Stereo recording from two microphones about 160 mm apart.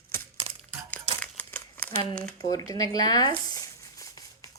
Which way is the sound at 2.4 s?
20° left (ahead or behind).